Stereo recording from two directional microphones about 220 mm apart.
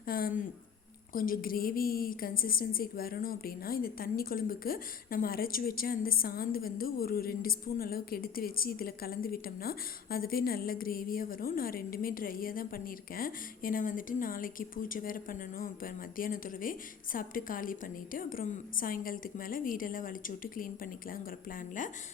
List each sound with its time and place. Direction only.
0.0 s a man's voice: 40° left (ahead or behind)